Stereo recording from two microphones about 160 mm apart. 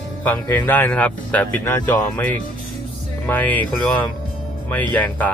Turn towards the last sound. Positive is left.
turn(degrees=10)  # may be behind; listen again after turning